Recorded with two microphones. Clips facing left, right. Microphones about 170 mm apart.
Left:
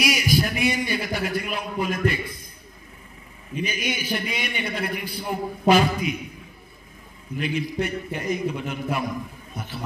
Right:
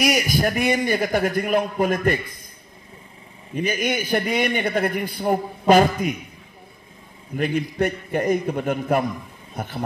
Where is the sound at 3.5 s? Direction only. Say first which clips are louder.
Right 5 dB; 50° right (ahead or behind).